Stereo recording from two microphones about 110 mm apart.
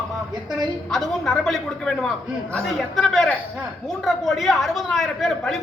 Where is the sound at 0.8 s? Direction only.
5° left (ahead or behind).